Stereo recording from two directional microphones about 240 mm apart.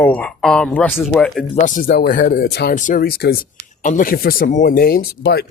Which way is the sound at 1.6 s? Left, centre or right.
Left.